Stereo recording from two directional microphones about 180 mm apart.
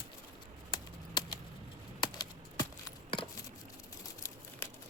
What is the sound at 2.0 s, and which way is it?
Coin, 20° left (ahead or behind).